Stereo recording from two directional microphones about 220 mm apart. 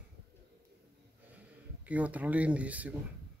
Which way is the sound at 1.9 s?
5° right (ahead or behind).